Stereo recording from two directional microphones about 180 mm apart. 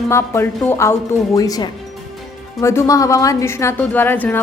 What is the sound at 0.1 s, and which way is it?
A woman's voice, 15° left (ahead or behind).